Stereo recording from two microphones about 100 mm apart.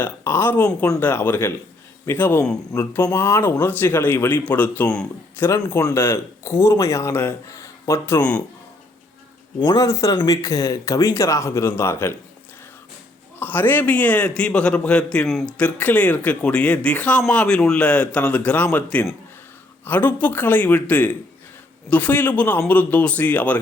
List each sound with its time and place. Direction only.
0.0 s speech: 25° left (ahead or behind)
5.4 s speech: 35° left (ahead or behind)
9.6 s speech: 35° left (ahead or behind)
13.4 s speech: 20° left (ahead or behind)